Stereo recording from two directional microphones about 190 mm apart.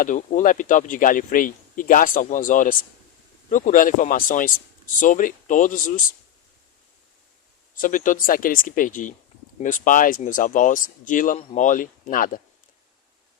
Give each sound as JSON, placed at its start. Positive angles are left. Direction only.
{"t": 0.0, "sound": "speech", "side_deg": 45}
{"t": 7.8, "sound": "speech", "side_deg": 45}